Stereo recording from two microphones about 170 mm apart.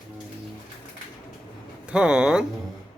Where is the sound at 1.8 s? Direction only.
5° right (ahead or behind).